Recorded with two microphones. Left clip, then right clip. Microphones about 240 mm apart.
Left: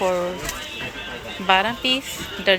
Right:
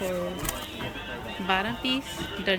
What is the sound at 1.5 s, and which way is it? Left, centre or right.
Speech, centre.